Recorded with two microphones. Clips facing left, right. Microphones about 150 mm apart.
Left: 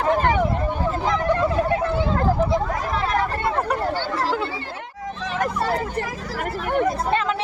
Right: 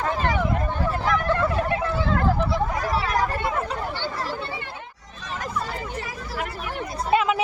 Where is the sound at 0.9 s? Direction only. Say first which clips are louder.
Left 2 dB; 20° left (ahead or behind).